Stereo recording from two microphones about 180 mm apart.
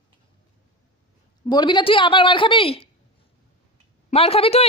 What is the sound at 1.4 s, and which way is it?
A woman's voice, 25° left (ahead or behind).